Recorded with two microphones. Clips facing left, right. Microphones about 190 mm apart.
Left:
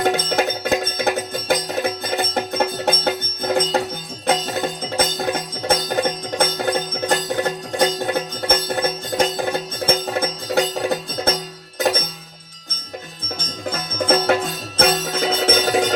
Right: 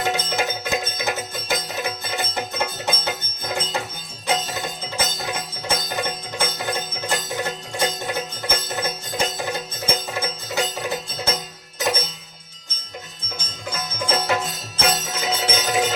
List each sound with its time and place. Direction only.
0.0 s music: 55° left (ahead or behind)
13.7 s music: 55° left (ahead or behind)